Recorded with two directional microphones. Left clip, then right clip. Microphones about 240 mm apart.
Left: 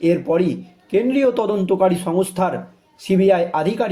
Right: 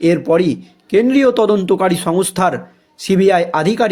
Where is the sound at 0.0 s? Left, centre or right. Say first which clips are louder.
Right 4 dB; right.